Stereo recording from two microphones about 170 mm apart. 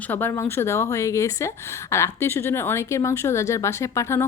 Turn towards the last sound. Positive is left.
turn(degrees=15)  # may be behind; listen again after turning